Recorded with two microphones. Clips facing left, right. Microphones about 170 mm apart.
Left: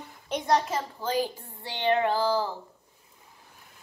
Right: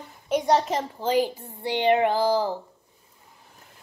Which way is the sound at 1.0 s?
15° right (ahead or behind).